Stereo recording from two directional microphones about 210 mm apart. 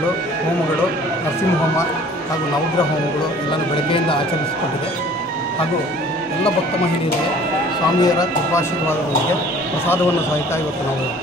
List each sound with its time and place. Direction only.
8.0 s speech: 15° left (ahead or behind)